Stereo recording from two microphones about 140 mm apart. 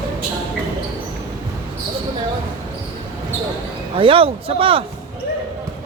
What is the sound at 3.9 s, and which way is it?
Speech, 40° right (ahead or behind).